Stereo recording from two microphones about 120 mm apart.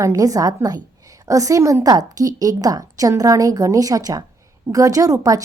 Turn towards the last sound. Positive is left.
turn(degrees=-30)  # may be behind; listen again after turning